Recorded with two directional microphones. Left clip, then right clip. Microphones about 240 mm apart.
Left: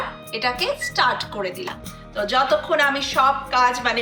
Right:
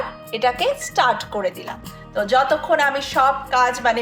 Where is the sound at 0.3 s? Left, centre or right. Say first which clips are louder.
Right 4 dB; right.